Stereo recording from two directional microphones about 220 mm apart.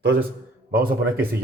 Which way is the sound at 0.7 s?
40° right (ahead or behind).